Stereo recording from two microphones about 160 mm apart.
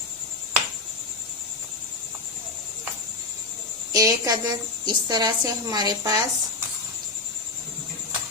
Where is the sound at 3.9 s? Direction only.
20° right (ahead or behind).